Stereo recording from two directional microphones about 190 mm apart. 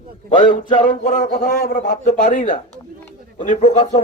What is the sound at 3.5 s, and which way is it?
Speech, 30° left (ahead or behind).